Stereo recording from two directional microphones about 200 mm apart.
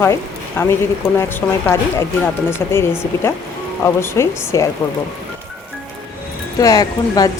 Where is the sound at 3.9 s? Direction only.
15° left (ahead or behind).